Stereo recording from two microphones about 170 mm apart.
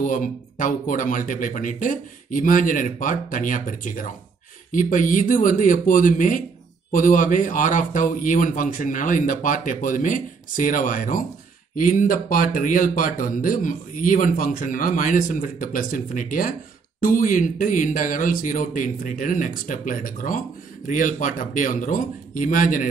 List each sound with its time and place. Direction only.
0.0 s speech: 50° left (ahead or behind)